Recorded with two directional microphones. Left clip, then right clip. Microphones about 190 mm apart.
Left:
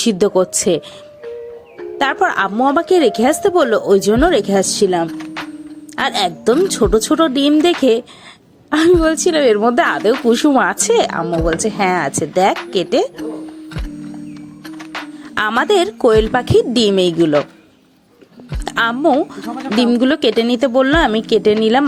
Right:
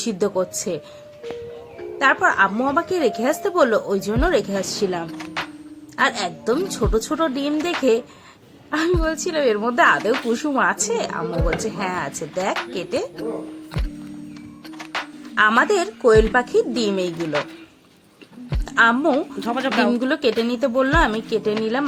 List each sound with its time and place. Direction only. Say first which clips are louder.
0.0 s a woman's voice: left 8 dB; 45° left (ahead or behind)
2.0 s a woman's voice: left 1 dB; 45° left (ahead or behind)
5.1 s music: left 2 dB; centre (ahead or behind)
6.0 s a woman's voice: left 4 dB; 45° left (ahead or behind)
8.7 s a woman's voice: left 9 dB; 45° left (ahead or behind)
14.8 s music: even; centre (ahead or behind)
15.4 s a woman's voice: left 2 dB; 50° left (ahead or behind)
18.6 s a woman's voice: right 1 dB; 45° left (ahead or behind)
19.1 s speech: left 5 dB; centre (ahead or behind)
19.9 s a woman's voice: left 6 dB; 40° left (ahead or behind)